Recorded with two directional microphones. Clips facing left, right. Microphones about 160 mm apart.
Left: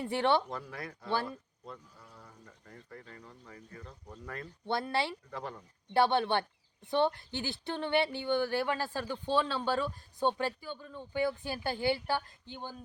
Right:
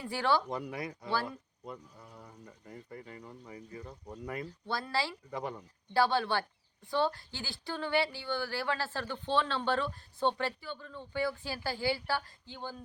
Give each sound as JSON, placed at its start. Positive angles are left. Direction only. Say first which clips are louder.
{"t": 0.0, "sound": "speech", "louder": "left 2 dB", "side_deg": 25}
{"t": 0.5, "sound": "speech", "louder": "right 4 dB", "side_deg": -15}
{"t": 4.6, "sound": "speech", "louder": "left 3 dB", "side_deg": 20}
{"t": 5.3, "sound": "speech", "louder": "right 3 dB", "side_deg": -10}
{"t": 5.9, "sound": "speech", "louder": "left 2 dB", "side_deg": 20}